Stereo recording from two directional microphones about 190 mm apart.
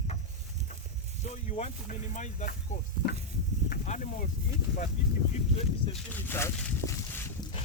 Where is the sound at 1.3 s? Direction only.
35° left (ahead or behind).